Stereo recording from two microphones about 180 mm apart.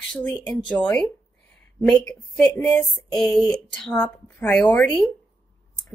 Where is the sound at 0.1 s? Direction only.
10° left (ahead or behind).